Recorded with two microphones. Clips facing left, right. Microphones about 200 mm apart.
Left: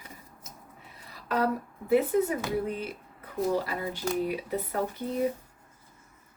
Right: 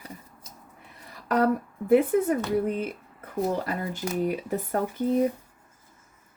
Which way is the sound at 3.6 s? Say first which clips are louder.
Right 1 dB; 45° right (ahead or behind).